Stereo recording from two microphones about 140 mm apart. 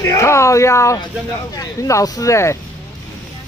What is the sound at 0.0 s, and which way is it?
Speech, 20° left (ahead or behind).